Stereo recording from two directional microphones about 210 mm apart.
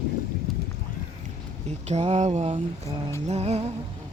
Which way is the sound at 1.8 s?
30° right (ahead or behind).